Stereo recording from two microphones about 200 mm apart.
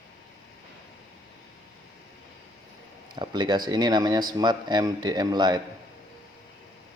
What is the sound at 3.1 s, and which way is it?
Speech, 20° right (ahead or behind).